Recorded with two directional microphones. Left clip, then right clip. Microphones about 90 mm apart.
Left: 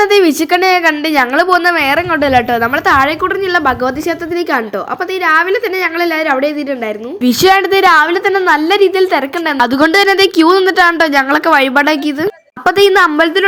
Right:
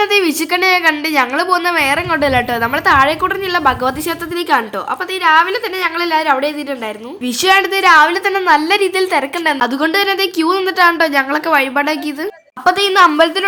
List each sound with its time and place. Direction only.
0.1 s a woman's voice: 45° left (ahead or behind); by 3.9 s 20° left (ahead or behind)
5.2 s a woman's voice: 20° left (ahead or behind)
7.3 s a woman's voice: 45° left (ahead or behind)
8.0 s a woman's voice: 20° left (ahead or behind)
9.8 s a woman's voice: 45° left (ahead or behind); by 13.4 s 30° left (ahead or behind)